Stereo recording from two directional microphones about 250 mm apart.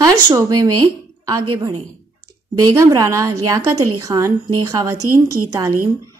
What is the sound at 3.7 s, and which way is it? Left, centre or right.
Speech, right.